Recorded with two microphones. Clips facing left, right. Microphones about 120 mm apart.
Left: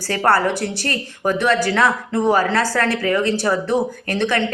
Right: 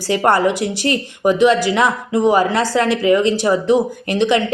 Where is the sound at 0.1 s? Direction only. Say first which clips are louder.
Right 3 dB; 15° right (ahead or behind).